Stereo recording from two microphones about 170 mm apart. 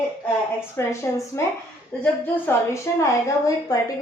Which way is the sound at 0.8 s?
15° left (ahead or behind).